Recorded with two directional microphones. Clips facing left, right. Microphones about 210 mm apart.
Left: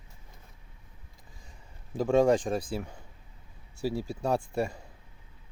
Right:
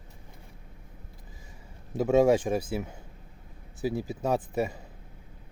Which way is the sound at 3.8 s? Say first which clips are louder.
Right 1 dB; 20° right (ahead or behind).